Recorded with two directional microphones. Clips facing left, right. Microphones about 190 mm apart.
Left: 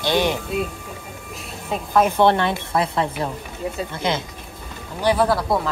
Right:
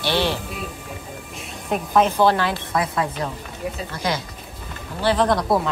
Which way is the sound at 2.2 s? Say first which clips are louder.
Left 1 dB; 25° left (ahead or behind).